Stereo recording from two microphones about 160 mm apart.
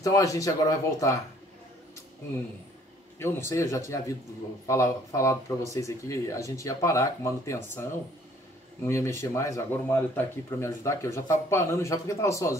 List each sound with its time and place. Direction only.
0.0 s speech: 20° left (ahead or behind)
3.4 s speech: 20° left (ahead or behind)